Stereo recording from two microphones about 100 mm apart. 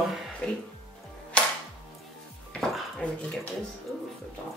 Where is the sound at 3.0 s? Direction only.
10° left (ahead or behind).